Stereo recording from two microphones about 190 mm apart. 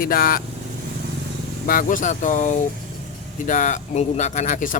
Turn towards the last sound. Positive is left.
turn(degrees=45)  # may be behind; listen again after turning